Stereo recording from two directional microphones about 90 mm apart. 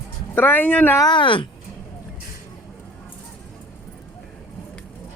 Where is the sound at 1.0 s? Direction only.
65° left (ahead or behind).